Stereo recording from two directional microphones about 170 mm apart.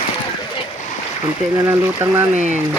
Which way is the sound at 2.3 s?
45° right (ahead or behind).